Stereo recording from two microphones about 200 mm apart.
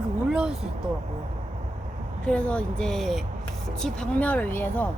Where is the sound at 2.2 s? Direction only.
5° left (ahead or behind).